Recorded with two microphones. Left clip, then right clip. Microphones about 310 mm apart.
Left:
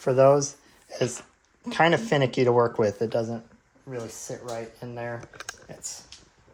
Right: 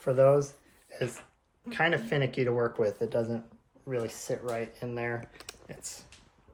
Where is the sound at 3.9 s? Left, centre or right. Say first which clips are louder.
Right 2 dB; centre.